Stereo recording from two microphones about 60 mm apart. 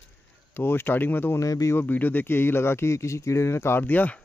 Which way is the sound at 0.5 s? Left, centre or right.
Left.